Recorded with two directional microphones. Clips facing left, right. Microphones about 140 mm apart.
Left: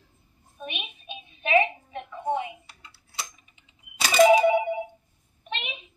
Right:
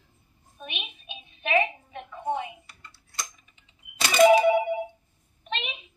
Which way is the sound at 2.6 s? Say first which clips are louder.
Even; centre (ahead or behind).